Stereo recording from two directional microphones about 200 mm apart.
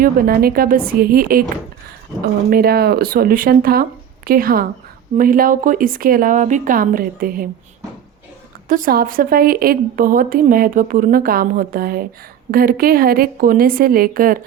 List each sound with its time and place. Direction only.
0.0 s a woman's voice: 45° right (ahead or behind)
2.5 s a woman's voice: 50° right (ahead or behind)
8.7 s a woman's voice: 45° right (ahead or behind)